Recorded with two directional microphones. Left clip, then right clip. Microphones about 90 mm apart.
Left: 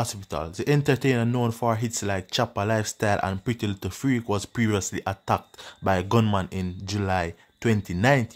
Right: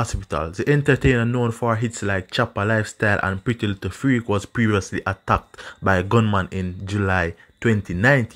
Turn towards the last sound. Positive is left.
turn(degrees=-20)  # may be behind; listen again after turning